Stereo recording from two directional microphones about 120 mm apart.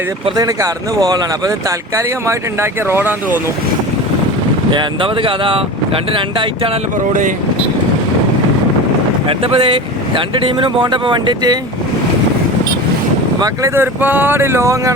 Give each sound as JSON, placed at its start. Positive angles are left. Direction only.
{"t": 0.3, "sound": "speech", "side_deg": -30}
{"t": 4.7, "sound": "speech", "side_deg": -45}
{"t": 7.1, "sound": "speech", "side_deg": -90}
{"t": 9.2, "sound": "speech", "side_deg": -50}
{"t": 13.4, "sound": "speech", "side_deg": -25}